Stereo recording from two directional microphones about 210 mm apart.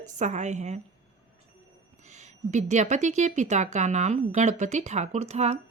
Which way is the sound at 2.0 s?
35° right (ahead or behind).